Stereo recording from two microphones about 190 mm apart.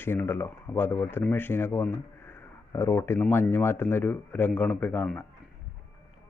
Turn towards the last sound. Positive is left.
turn(degrees=10)  # may be behind; listen again after turning